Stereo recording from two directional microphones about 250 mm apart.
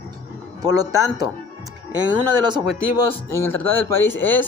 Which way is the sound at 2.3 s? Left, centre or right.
Centre.